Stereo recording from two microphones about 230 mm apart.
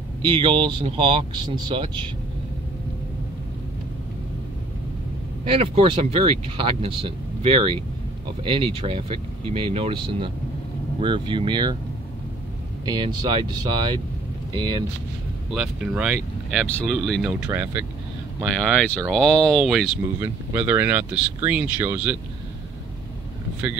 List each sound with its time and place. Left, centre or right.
0.2 s speech: right
5.5 s speech: right
12.8 s speech: right
15.5 s speech: centre